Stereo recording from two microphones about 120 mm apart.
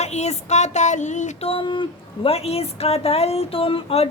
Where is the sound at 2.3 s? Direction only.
60° left (ahead or behind).